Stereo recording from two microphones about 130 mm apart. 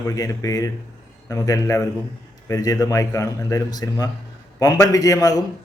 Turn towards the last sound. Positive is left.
turn(degrees=30)  # may be behind; listen again after turning